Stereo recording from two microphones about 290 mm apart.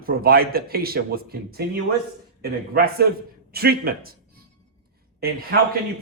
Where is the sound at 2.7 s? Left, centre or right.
Right.